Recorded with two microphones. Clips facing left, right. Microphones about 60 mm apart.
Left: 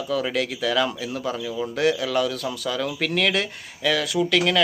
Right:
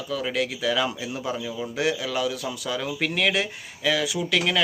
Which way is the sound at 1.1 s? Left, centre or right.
Centre.